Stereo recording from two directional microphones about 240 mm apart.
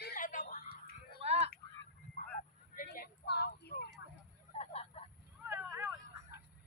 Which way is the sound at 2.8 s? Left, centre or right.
Left.